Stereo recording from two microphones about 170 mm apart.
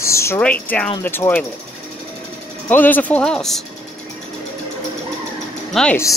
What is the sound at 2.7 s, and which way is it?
Speech, 10° left (ahead or behind).